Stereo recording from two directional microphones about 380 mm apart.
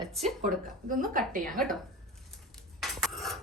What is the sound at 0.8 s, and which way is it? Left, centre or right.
Speech, right.